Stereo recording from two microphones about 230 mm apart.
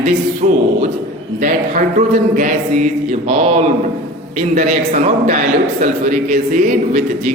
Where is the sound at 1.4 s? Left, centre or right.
Right.